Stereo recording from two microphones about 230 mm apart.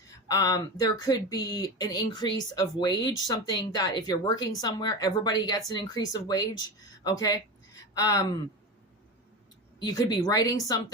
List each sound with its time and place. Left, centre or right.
0.3 s speech: centre
9.8 s speech: centre